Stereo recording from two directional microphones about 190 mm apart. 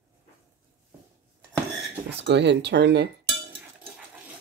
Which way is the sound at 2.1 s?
65° right (ahead or behind).